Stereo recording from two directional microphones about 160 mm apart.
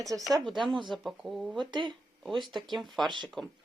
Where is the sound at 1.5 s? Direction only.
30° right (ahead or behind).